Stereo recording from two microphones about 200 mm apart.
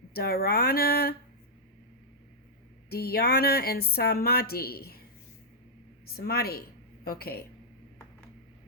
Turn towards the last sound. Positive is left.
turn(degrees=50)  # may be behind; listen again after turning